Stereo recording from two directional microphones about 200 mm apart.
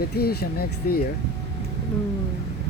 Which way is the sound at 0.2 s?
50° left (ahead or behind).